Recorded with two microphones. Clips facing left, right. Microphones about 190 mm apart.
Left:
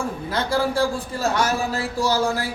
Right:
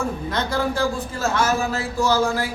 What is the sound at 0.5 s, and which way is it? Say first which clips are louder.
Speech: left 2 dB; 30° left (ahead or behind).